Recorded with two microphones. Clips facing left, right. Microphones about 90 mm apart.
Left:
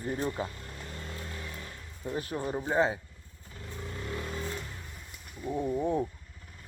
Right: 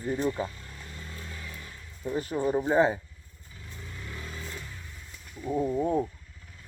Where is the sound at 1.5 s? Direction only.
35° left (ahead or behind).